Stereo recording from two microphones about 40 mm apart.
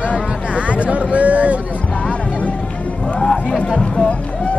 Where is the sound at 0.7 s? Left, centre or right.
Right.